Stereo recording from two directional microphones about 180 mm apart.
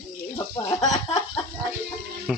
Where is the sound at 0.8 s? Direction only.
20° left (ahead or behind).